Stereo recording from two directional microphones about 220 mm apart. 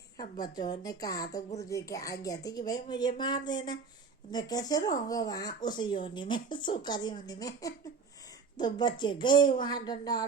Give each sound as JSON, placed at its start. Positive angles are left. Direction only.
{"t": 0.3, "sound": "speech", "side_deg": 20}